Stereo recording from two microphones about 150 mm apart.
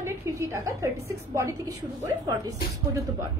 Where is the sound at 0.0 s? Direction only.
15° right (ahead or behind).